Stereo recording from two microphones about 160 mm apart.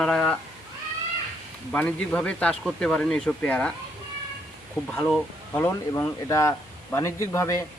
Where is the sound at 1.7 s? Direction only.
10° left (ahead or behind).